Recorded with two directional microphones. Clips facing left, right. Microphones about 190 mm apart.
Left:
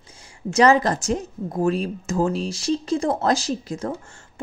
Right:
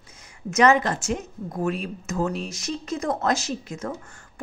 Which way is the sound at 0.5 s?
35° left (ahead or behind).